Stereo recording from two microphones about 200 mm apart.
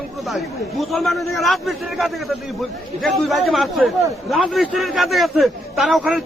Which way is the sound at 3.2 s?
Centre (ahead or behind).